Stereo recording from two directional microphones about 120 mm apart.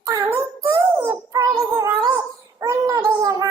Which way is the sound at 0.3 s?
20° right (ahead or behind).